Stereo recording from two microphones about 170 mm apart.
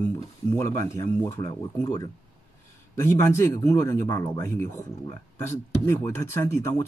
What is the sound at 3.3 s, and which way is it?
Speech, 15° left (ahead or behind).